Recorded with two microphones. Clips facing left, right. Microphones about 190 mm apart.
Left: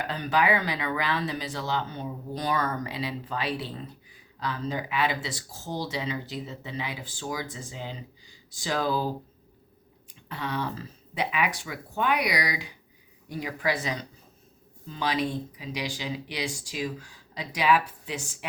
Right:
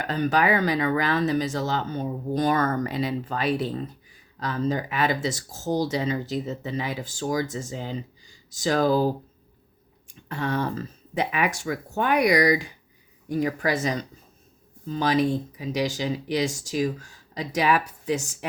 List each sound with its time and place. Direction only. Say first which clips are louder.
0.1 s speech: right 4 dB; 45° right (ahead or behind)
10.1 s speech: right 6 dB; 45° right (ahead or behind)